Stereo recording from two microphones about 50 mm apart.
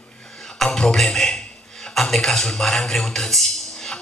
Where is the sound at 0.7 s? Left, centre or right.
Centre.